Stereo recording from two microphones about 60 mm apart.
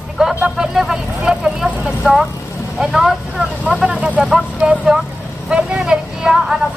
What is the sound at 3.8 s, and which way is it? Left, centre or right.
Speech, right.